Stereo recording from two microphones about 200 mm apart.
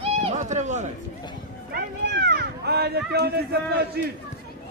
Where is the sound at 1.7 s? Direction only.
50° right (ahead or behind).